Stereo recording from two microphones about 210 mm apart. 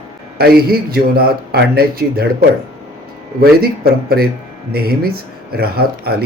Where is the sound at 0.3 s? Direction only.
45° right (ahead or behind).